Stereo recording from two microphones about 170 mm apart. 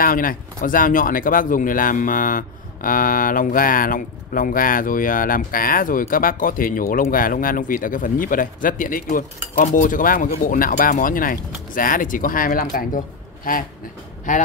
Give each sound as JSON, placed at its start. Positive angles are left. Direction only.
{"t": 0.0, "sound": "speech", "side_deg": 55}